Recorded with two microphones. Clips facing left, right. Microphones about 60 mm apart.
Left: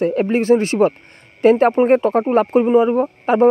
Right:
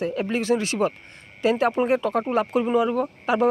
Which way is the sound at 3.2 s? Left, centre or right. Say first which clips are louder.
Left 8 dB; left.